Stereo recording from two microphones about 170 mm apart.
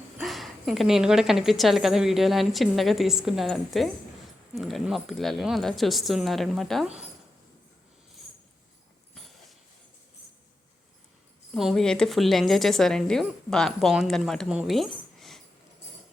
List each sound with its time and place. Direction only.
0.2 s a woman's voice: centre (ahead or behind)
9.1 s a sound: centre (ahead or behind)
11.5 s a woman's voice: centre (ahead or behind)